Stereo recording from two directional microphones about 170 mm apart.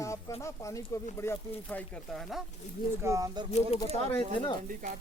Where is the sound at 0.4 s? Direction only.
15° left (ahead or behind).